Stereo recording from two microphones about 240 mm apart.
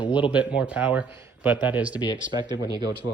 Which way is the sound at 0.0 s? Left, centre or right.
Centre.